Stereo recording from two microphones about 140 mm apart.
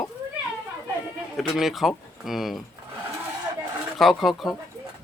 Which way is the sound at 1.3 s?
Centre (ahead or behind).